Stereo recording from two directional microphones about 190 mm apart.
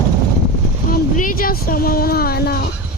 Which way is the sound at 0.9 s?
50° left (ahead or behind).